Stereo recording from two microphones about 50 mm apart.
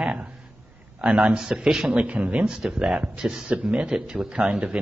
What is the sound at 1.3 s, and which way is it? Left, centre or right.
Speech, centre.